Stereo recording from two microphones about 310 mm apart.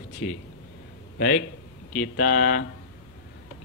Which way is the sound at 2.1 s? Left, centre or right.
Left.